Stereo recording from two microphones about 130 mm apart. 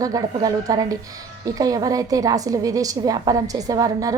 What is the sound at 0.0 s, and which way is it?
A woman's voice, 30° right (ahead or behind).